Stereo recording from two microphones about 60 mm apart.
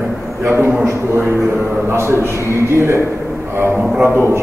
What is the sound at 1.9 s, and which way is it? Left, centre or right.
Speech, right.